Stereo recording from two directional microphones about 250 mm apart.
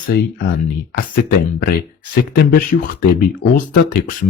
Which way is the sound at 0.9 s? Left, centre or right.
Left.